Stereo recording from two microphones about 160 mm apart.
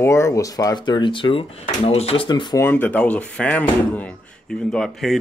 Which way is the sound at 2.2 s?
30° left (ahead or behind).